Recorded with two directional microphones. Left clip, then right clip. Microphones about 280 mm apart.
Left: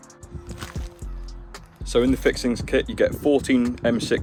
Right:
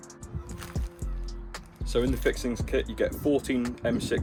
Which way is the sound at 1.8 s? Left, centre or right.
Left.